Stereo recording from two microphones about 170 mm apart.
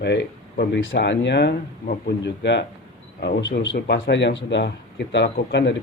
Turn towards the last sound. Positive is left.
turn(degrees=90)